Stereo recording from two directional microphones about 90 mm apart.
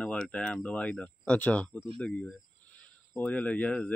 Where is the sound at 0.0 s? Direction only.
10° left (ahead or behind).